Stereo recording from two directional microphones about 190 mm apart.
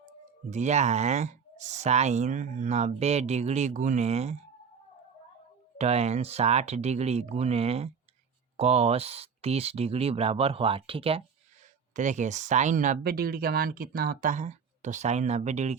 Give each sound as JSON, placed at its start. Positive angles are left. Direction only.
{"t": 0.5, "sound": "speech", "side_deg": -35}
{"t": 5.7, "sound": "speech", "side_deg": -35}
{"t": 11.9, "sound": "speech", "side_deg": -40}